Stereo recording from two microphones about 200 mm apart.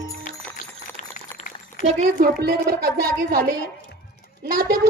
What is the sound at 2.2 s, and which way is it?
A woman's voice, 50° right (ahead or behind).